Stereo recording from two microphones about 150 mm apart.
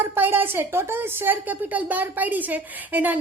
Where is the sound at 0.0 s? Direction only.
15° right (ahead or behind).